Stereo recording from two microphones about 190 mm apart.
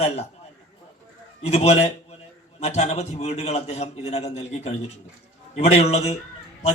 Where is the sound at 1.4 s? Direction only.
35° left (ahead or behind).